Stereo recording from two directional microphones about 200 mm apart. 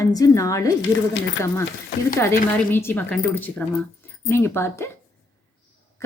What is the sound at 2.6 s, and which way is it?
Speech, 10° left (ahead or behind).